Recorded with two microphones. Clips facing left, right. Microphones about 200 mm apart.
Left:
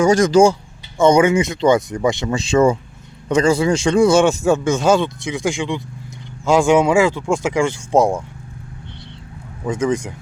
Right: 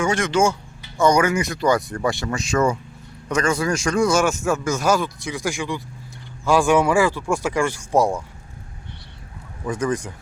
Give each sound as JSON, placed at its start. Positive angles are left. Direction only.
{"t": 0.0, "sound": "speech", "side_deg": 40}
{"t": 0.9, "sound": "a man's voice", "side_deg": 25}
{"t": 9.6, "sound": "a man's voice", "side_deg": 25}